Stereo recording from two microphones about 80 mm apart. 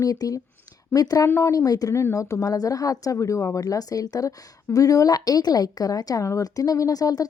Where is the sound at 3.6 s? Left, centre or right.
Left.